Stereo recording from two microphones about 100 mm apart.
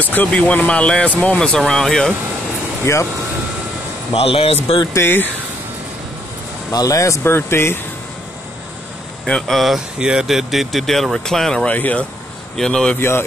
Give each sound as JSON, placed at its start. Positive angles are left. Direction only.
{"t": 0.0, "sound": "speech", "side_deg": 15}
{"t": 2.8, "sound": "speech", "side_deg": 30}
{"t": 4.1, "sound": "speech", "side_deg": 65}
{"t": 4.9, "sound": "speech", "side_deg": 20}
{"t": 6.7, "sound": "speech", "side_deg": 35}
{"t": 9.2, "sound": "speech", "side_deg": 5}